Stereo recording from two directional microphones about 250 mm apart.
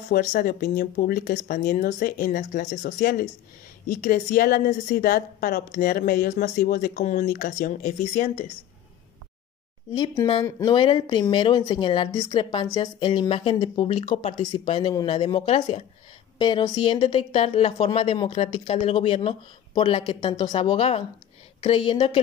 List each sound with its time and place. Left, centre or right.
0.1 s a woman's voice: left
9.9 s speech: centre